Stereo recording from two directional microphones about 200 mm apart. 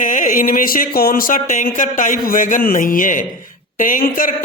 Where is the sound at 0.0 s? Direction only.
40° left (ahead or behind).